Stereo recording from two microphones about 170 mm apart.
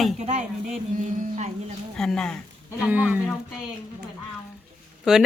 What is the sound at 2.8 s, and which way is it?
Speech, 10° right (ahead or behind).